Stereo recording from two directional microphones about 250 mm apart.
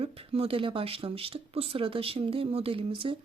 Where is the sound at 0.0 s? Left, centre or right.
Right.